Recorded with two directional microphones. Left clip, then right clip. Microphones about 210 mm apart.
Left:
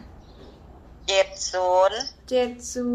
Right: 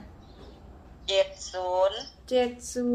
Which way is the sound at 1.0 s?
50° left (ahead or behind).